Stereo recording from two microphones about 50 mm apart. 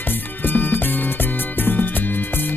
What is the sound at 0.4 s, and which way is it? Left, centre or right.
Music, left.